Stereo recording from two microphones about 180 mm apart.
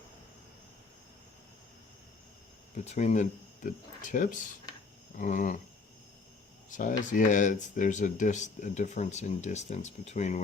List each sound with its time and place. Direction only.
2.7 s speech: 40° left (ahead or behind)
6.7 s speech: 45° left (ahead or behind)